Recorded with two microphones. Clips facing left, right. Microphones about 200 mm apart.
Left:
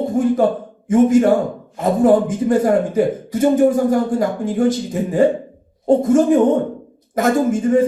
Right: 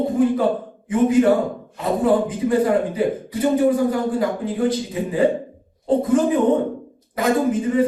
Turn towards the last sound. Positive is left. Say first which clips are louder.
# left 3 dB
turn(degrees=45)  # may be behind; listen again after turning